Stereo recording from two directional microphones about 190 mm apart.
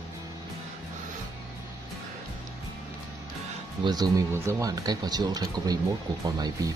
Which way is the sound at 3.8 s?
20° right (ahead or behind).